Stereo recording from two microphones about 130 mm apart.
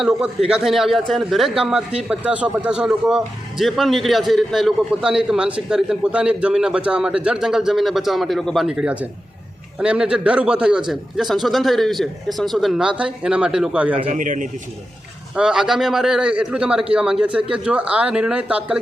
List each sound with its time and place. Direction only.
0.0 s a man's voice: 5° right (ahead or behind)
14.1 s a man's voice: 85° right
15.4 s a man's voice: 5° right (ahead or behind)